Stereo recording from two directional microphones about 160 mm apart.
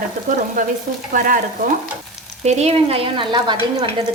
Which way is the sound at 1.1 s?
55° right (ahead or behind).